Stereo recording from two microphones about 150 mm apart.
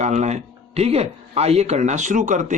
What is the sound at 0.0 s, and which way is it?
Speech, 50° right (ahead or behind).